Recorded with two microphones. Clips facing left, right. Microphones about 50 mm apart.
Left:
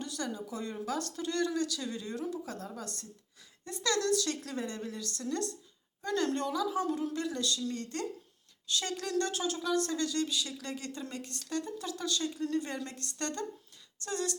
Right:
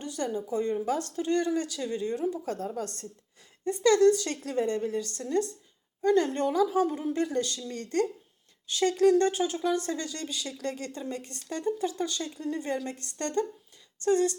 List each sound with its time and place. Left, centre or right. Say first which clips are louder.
0.0 s a sound: right 5 dB; right
0.3 s speech: right 9 dB; right
2.5 s a woman's voice: right 8 dB; right
3.6 s speech: right 11 dB; right
6.7 s speech: right 6 dB; right